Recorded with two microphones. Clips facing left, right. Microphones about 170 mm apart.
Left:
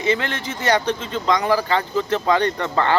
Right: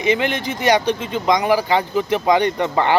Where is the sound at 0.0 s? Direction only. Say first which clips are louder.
Right 3 dB; 15° right (ahead or behind).